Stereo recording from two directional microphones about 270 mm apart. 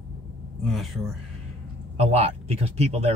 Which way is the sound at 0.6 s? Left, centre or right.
Centre.